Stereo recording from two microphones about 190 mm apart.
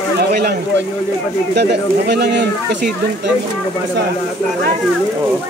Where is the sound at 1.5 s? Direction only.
60° right (ahead or behind).